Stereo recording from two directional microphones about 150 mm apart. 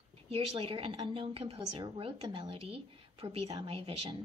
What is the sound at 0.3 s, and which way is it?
A woman's voice, 40° right (ahead or behind).